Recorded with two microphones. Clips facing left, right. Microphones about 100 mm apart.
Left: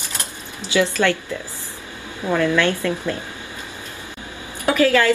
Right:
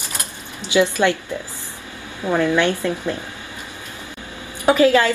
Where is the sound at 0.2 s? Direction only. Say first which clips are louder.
Even; 20° right (ahead or behind).